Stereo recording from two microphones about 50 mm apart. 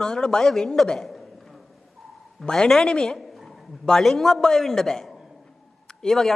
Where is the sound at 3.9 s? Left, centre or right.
Centre.